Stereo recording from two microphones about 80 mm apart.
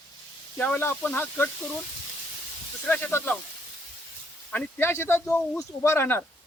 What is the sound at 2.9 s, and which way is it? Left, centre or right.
Speech, left.